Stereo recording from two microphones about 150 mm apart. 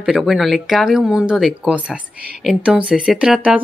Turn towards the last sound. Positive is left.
turn(degrees=-5)  # may be behind; listen again after turning